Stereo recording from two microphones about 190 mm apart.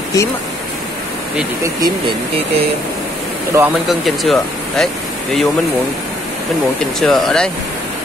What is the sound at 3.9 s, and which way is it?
Speech, centre (ahead or behind).